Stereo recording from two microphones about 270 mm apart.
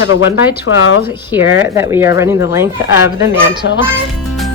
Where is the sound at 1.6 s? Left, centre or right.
Centre.